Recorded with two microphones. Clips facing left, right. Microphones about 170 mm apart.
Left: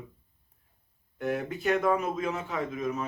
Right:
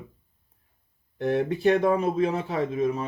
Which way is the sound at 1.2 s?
35° right (ahead or behind).